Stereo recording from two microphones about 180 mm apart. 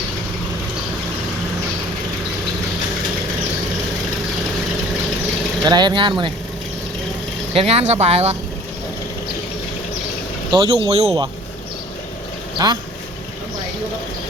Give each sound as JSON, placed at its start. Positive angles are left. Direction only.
{"t": 5.6, "sound": "speech", "side_deg": -25}
{"t": 7.5, "sound": "speech", "side_deg": -35}
{"t": 10.5, "sound": "speech", "side_deg": -30}
{"t": 12.5, "sound": "speech", "side_deg": -20}